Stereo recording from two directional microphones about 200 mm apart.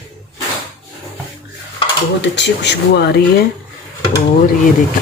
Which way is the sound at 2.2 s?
60° left (ahead or behind).